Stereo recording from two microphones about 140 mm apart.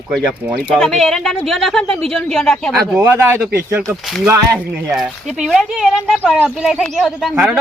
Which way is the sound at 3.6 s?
20° right (ahead or behind).